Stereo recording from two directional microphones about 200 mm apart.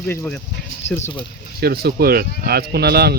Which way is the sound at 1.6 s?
50° right (ahead or behind).